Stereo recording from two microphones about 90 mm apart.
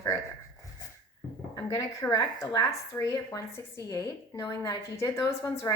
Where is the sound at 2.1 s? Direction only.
40° left (ahead or behind).